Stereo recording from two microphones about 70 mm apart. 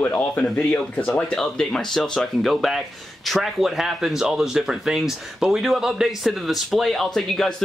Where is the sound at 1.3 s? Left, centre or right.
Centre.